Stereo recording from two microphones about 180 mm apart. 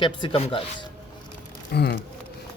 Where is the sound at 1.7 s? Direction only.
65° left (ahead or behind).